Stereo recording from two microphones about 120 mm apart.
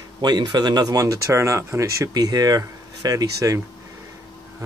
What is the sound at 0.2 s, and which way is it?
Speech, 35° right (ahead or behind).